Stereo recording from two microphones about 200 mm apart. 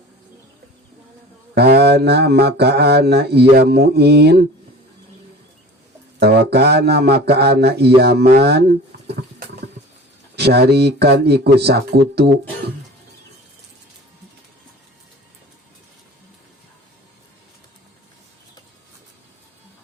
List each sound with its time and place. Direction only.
1.5 s speech: 55° right (ahead or behind)
6.1 s speech: 55° right (ahead or behind)
10.3 s speech: 55° right (ahead or behind)